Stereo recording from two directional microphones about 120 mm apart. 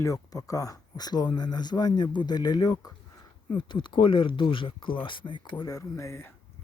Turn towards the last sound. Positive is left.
turn(degrees=25)  # may be behind; listen again after turning